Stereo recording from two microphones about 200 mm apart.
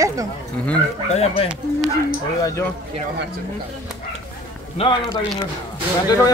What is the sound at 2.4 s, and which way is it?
Speech, 15° left (ahead or behind).